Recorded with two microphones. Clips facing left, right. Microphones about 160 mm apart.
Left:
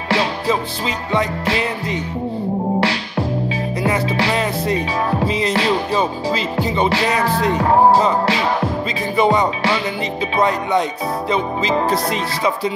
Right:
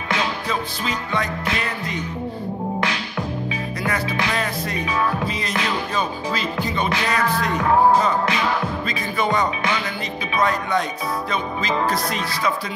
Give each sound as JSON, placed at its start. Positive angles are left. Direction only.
{"t": 0.1, "sound": "music", "side_deg": 35}
{"t": 0.8, "sound": "music", "side_deg": 20}
{"t": 2.8, "sound": "music", "side_deg": 35}
{"t": 8.8, "sound": "music", "side_deg": 20}